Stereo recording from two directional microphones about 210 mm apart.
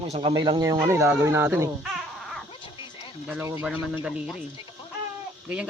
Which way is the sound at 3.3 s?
10° right (ahead or behind).